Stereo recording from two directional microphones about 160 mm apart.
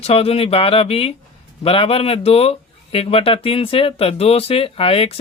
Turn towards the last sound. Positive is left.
turn(degrees=35)  # may be behind; listen again after turning